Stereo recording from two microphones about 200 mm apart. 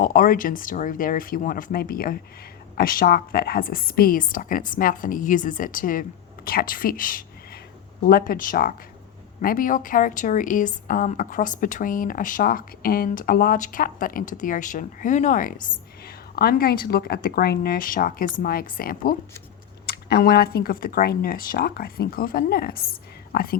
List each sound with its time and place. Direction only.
0.0 s a woman's voice: 45° left (ahead or behind)